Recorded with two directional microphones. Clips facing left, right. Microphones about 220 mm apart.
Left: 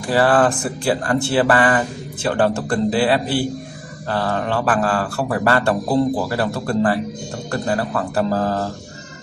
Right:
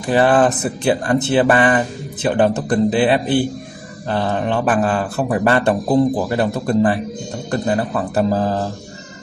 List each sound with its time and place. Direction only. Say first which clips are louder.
0.0 s a man's voice: right 2 dB; 20° right (ahead or behind)